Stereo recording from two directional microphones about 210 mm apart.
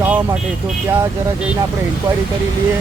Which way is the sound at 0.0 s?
10° right (ahead or behind).